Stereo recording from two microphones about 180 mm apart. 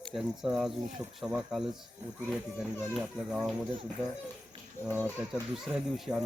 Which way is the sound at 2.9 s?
5° right (ahead or behind).